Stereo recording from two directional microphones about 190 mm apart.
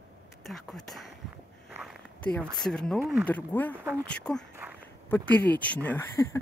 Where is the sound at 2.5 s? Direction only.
5° left (ahead or behind).